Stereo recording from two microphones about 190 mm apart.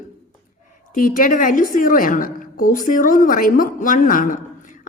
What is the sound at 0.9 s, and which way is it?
A woman's voice, 45° left (ahead or behind).